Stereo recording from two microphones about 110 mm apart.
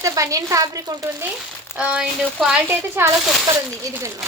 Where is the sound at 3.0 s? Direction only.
25° right (ahead or behind).